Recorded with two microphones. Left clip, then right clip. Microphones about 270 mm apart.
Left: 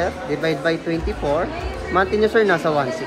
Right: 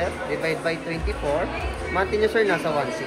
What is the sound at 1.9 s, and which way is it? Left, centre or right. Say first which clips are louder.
Speech: left 5 dB; left.